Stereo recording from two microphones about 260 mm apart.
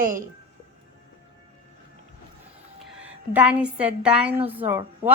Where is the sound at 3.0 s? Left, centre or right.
Centre.